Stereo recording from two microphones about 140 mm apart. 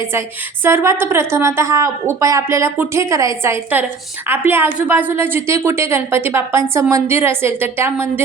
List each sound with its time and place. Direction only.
0.1 s a woman's voice: 15° right (ahead or behind)